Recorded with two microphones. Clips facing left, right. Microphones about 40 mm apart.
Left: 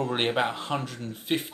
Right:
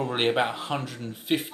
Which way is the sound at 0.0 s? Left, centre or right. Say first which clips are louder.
Right 1 dB; centre.